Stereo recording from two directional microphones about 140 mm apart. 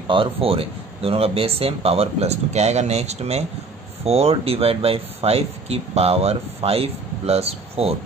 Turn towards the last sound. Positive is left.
turn(degrees=-45)  # may be behind; listen again after turning